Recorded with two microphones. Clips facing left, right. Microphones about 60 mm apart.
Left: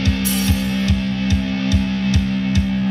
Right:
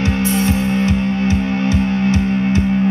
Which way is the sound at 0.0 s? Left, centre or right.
Right.